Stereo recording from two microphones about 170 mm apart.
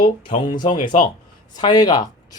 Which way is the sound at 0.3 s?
30° left (ahead or behind).